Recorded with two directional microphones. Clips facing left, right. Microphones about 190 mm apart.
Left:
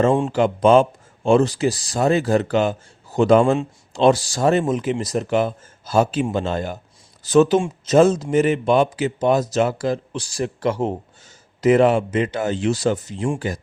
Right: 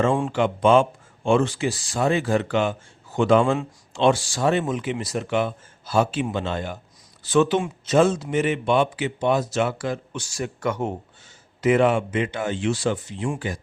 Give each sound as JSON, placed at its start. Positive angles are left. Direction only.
{"t": 0.3, "sound": "speech", "side_deg": 40}